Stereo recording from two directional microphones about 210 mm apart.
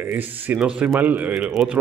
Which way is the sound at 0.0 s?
10° right (ahead or behind).